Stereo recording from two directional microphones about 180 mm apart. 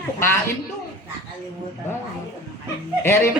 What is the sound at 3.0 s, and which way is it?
Speech, 15° left (ahead or behind).